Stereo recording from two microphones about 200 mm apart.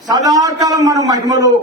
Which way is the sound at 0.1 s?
20° right (ahead or behind).